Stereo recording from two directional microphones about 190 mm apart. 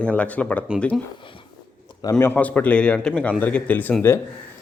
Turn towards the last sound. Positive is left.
turn(degrees=10)  # may be behind; listen again after turning